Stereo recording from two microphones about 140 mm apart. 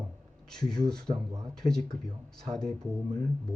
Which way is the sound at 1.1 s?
25° right (ahead or behind).